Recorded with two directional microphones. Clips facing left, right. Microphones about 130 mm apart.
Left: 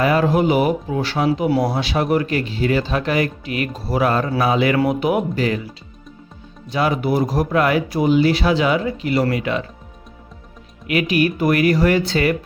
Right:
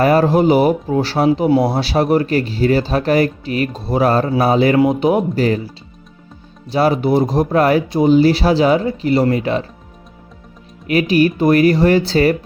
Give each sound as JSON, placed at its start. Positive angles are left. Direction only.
{"t": 0.0, "sound": "speech", "side_deg": -40}
{"t": 4.8, "sound": "speech", "side_deg": -25}
{"t": 10.8, "sound": "speech", "side_deg": -30}